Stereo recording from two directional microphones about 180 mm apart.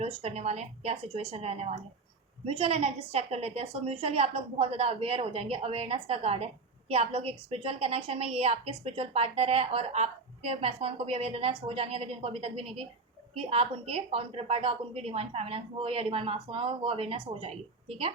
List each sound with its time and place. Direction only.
0.0 s a woman's voice: 35° right (ahead or behind)